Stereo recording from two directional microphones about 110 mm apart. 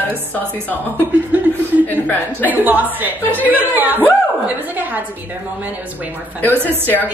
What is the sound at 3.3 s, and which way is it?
Speech, 15° left (ahead or behind).